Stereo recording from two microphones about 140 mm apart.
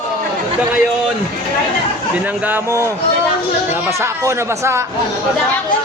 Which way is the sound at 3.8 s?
20° right (ahead or behind).